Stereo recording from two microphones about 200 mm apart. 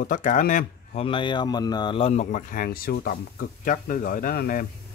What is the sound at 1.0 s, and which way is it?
Speech, 25° left (ahead or behind).